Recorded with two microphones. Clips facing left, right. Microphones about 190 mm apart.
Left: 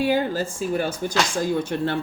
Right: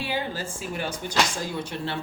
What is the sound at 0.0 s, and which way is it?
Speech, 45° left (ahead or behind).